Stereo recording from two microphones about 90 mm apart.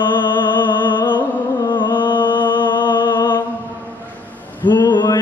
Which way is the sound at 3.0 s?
55° left (ahead or behind).